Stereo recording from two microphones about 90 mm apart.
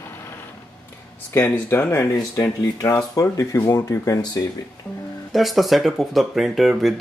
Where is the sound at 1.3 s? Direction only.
25° left (ahead or behind); by 4.4 s 40° left (ahead or behind).